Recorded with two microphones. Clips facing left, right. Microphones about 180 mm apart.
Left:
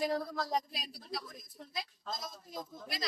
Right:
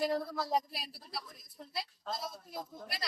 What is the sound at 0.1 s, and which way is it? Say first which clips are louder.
Speech: right 1 dB; 5° right (ahead or behind).